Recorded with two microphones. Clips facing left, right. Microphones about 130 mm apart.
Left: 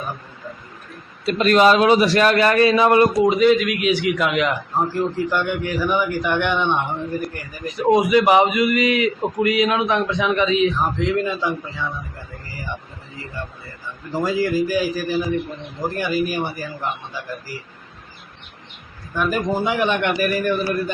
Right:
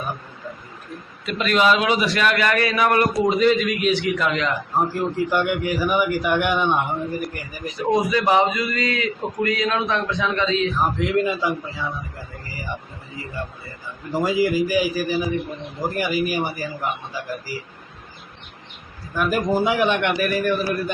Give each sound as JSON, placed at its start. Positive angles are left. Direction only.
{"t": 1.2, "sound": "a man's voice", "side_deg": 40}
{"t": 3.2, "sound": "a man's voice", "side_deg": 5}
{"t": 4.7, "sound": "a man's voice", "side_deg": -15}
{"t": 7.8, "sound": "a man's voice", "side_deg": 20}
{"t": 10.8, "sound": "a man's voice", "side_deg": -5}
{"t": 14.1, "sound": "a man's voice", "side_deg": -15}
{"t": 19.1, "sound": "a man's voice", "side_deg": -5}